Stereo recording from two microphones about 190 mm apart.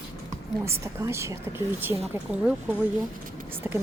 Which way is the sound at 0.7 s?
15° right (ahead or behind).